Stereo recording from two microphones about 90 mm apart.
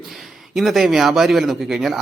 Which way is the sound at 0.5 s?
5° right (ahead or behind).